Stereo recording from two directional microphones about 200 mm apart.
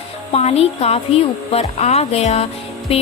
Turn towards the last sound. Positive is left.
turn(degrees=30)  # may be behind; listen again after turning